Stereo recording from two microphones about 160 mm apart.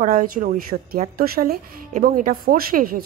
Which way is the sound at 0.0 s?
55° right (ahead or behind).